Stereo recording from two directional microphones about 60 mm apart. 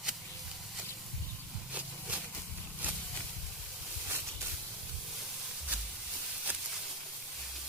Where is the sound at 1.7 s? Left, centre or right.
Right.